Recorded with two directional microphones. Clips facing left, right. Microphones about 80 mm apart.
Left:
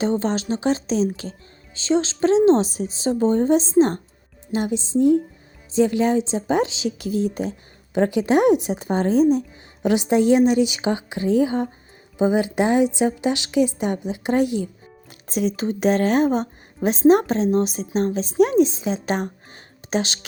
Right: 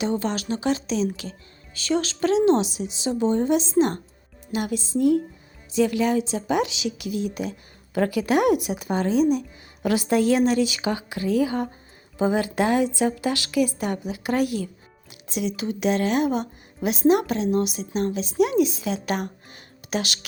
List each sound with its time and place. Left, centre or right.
0.0 s a woman's voice: left
9.8 s speech: left
15.3 s a woman's voice: left